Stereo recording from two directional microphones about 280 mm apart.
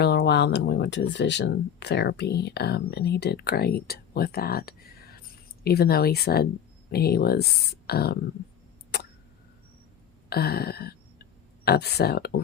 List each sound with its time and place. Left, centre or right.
0.0 s speech: left
8.9 s a sound: left
10.2 s speech: left